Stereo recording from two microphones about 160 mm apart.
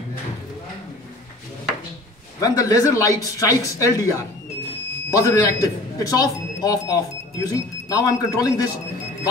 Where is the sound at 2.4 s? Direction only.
20° left (ahead or behind).